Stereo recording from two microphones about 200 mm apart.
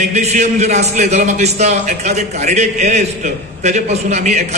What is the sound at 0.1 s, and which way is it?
A man's voice, 35° right (ahead or behind).